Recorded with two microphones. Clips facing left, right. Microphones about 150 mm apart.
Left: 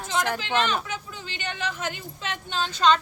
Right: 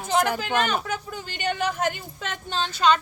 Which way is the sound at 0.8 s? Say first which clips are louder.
Right 4 dB; 50° right (ahead or behind).